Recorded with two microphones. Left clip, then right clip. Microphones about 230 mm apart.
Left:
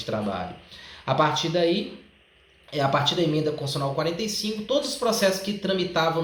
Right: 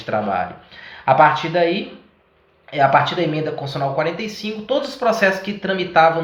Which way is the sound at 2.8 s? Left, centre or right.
Centre.